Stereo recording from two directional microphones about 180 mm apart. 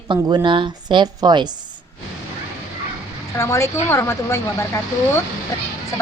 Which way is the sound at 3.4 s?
15° left (ahead or behind).